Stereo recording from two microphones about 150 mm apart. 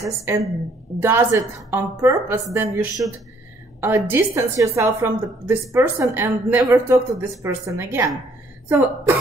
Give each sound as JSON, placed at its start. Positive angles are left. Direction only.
{"t": 0.3, "sound": "a woman's voice", "side_deg": -15}